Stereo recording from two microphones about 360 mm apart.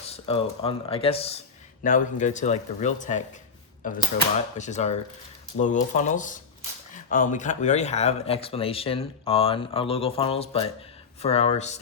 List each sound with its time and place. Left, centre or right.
0.1 s speech: centre